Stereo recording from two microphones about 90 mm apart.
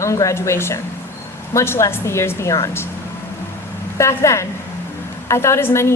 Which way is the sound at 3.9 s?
35° left (ahead or behind).